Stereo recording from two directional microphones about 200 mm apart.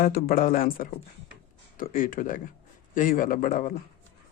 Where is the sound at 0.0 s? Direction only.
50° left (ahead or behind).